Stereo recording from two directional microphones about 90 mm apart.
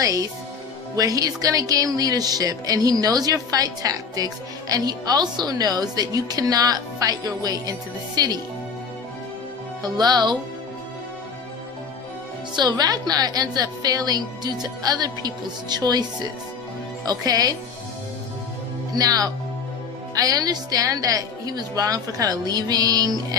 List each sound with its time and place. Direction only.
0.0 s a woman's voice: 40° right (ahead or behind)
9.8 s a woman's voice: 50° right (ahead or behind)
12.5 s a woman's voice: 45° right (ahead or behind)
18.9 s a woman's voice: 45° right (ahead or behind)